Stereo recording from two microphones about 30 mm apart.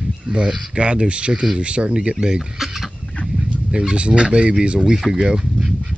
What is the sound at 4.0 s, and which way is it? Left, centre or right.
Speech, right.